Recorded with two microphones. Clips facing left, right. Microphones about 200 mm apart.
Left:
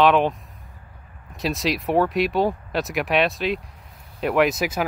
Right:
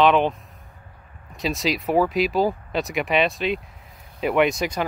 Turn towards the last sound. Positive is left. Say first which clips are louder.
# even
turn(degrees=5)  # may be behind; listen again after turning